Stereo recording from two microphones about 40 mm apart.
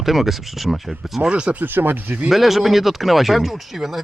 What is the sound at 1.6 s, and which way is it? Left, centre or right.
Speech, right.